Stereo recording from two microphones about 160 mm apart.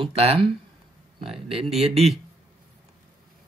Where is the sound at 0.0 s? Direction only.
40° right (ahead or behind).